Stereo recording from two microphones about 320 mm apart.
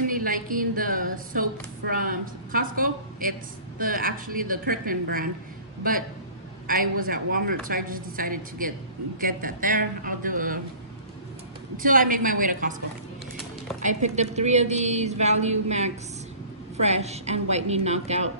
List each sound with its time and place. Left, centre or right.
0.0 s a woman's voice: right
11.8 s a woman's voice: right
13.7 s a woman's voice: right
16.8 s a woman's voice: centre